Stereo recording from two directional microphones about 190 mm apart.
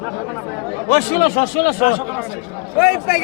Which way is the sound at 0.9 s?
50° left (ahead or behind).